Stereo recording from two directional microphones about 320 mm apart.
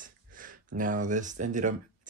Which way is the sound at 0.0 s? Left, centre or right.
Right.